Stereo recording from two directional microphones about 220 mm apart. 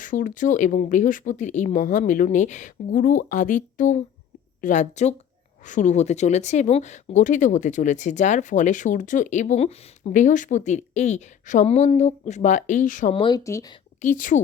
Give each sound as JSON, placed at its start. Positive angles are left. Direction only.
{"t": 0.0, "sound": "speech", "side_deg": 35}
{"t": 13.2, "sound": "speech", "side_deg": 15}
{"t": 14.0, "sound": "speech", "side_deg": 35}